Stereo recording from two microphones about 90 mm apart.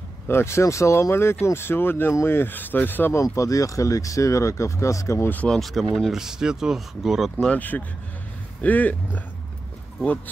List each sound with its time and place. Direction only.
0.3 s speech: 30° left (ahead or behind)
3.3 s speech: 40° left (ahead or behind)
5.3 s speech: 15° left (ahead or behind)
5.6 s speech: centre (ahead or behind)
8.6 s speech: 20° left (ahead or behind)